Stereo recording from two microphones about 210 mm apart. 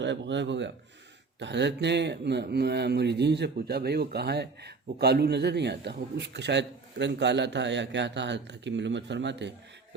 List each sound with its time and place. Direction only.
0.0 s speech: 55° right (ahead or behind)